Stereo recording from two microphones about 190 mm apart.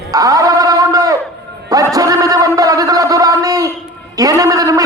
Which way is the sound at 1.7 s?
20° right (ahead or behind).